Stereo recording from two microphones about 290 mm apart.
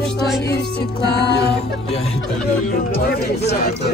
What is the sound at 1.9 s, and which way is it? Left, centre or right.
Speech, left.